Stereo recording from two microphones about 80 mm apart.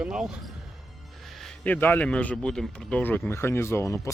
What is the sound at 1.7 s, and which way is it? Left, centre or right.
Speech, left.